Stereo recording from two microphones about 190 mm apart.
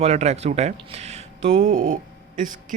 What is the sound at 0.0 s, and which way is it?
Speech, 35° right (ahead or behind).